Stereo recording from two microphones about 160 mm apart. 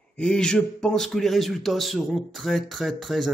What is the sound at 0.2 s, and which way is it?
A man's voice, 5° left (ahead or behind).